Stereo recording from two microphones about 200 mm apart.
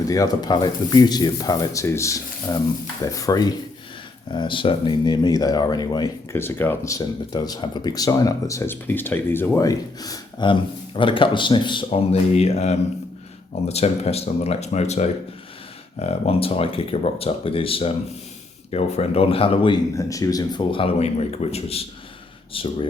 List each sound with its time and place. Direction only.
0.1 s speech: 20° left (ahead or behind)